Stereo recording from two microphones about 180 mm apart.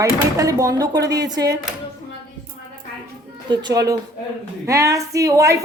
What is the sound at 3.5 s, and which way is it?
A woman's voice, 25° right (ahead or behind).